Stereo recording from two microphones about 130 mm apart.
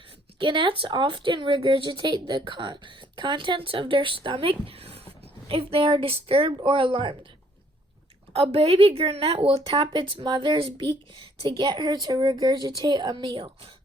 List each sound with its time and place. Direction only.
0.3 s speech: 40° right (ahead or behind)
8.4 s a woman's voice: 50° right (ahead or behind)
9.7 s speech: 35° right (ahead or behind)